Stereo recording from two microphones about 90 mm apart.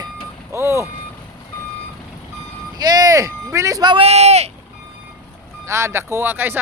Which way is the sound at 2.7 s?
45° right (ahead or behind).